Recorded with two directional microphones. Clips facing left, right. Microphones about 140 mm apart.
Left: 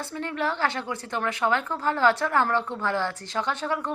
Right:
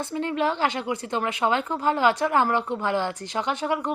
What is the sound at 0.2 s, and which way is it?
Speech, 15° right (ahead or behind).